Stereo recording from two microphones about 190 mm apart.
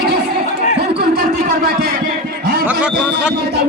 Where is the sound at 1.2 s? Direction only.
50° right (ahead or behind).